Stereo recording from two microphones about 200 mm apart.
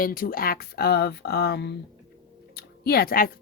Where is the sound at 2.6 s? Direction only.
50° left (ahead or behind).